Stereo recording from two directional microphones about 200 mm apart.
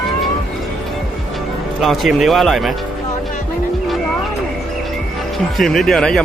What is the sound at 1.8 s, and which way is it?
Speech, centre (ahead or behind).